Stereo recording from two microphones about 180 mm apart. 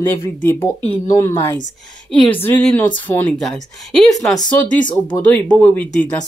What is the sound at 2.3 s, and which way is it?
Speech, 10° left (ahead or behind).